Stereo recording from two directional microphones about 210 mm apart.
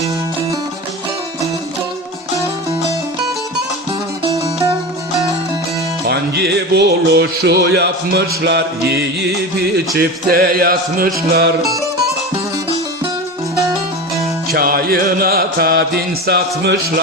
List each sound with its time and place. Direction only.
6.1 s music: 50° right (ahead or behind)
14.5 s music: 45° right (ahead or behind)